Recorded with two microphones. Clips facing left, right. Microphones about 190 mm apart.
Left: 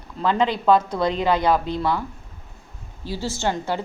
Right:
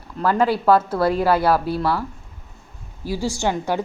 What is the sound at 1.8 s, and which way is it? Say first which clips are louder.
Speech: right 1 dB; 20° left (ahead or behind).